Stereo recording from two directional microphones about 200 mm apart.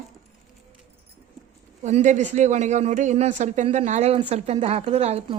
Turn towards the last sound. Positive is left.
turn(degrees=-30)  # may be behind; listen again after turning